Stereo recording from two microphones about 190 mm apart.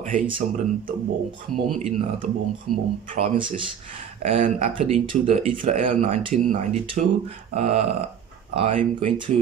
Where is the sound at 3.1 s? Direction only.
30° right (ahead or behind).